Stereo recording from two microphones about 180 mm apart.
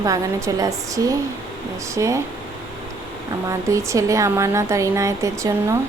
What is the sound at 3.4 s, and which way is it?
Speech, 15° right (ahead or behind).